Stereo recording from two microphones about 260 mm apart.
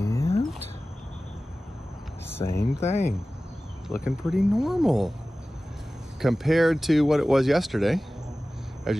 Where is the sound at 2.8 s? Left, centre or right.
Left.